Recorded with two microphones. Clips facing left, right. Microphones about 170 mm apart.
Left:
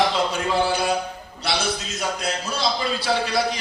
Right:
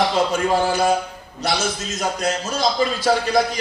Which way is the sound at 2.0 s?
45° right (ahead or behind).